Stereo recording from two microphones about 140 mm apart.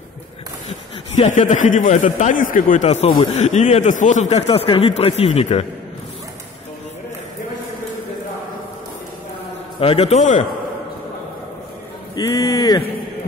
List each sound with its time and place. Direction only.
1.1 s a man's voice: 60° left (ahead or behind)
9.8 s speech: 40° left (ahead or behind)
12.2 s speech: 25° left (ahead or behind)